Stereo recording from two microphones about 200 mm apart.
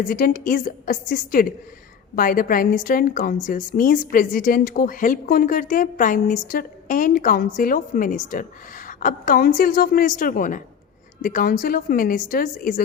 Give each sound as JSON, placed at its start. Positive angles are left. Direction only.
{"t": 0.1, "sound": "a woman's voice", "side_deg": 40}